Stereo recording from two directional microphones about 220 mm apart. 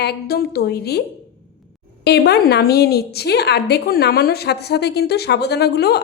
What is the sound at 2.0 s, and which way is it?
A woman's voice, 50° left (ahead or behind).